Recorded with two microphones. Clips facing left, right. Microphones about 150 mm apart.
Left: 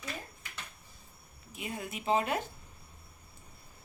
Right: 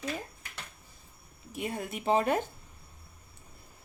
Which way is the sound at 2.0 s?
35° right (ahead or behind).